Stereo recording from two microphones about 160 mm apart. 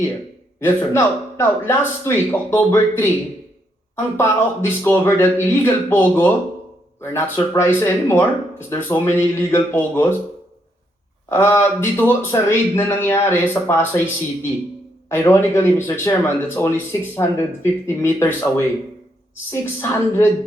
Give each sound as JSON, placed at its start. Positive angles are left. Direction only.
{"t": 0.6, "sound": "speech", "side_deg": 15}
{"t": 11.3, "sound": "speech", "side_deg": 15}
{"t": 15.1, "sound": "speech", "side_deg": 15}